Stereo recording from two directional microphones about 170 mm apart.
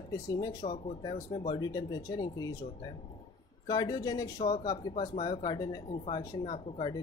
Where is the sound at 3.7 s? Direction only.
25° left (ahead or behind).